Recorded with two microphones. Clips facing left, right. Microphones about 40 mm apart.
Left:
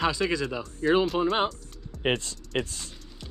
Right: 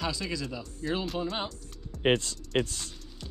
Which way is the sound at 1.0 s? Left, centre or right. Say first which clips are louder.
Left 7 dB; centre.